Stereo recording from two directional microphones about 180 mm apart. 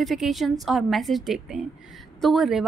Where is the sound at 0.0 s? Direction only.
Centre (ahead or behind).